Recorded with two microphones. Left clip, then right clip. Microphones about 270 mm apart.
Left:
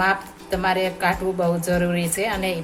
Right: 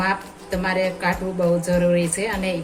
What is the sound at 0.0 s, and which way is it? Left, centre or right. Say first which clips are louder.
A woman's voice: left 2 dB; left.